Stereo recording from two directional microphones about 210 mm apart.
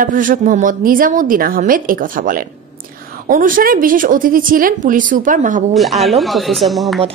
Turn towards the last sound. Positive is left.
turn(degrees=0)  # may be behind; listen again after turning